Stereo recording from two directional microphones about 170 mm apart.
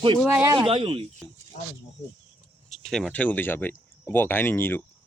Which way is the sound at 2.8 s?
5° left (ahead or behind).